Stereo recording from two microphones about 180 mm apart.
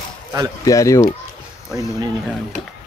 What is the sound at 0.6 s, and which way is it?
Speech, 20° left (ahead or behind).